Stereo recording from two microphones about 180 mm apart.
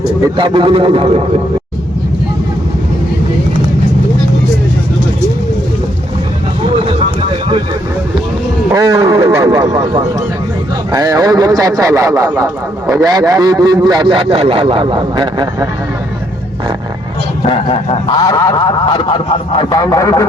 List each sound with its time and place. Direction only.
0.3 s a man's voice: 25° right (ahead or behind)
6.7 s vehicle: 30° right (ahead or behind)
8.7 s a man's voice: 20° right (ahead or behind)
17.4 s honk: 30° left (ahead or behind)